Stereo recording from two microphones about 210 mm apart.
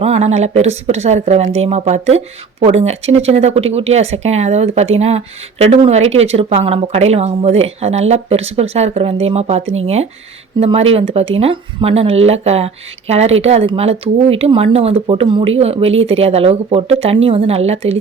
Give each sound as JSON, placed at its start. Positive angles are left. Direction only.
{"t": 0.0, "sound": "speech", "side_deg": -30}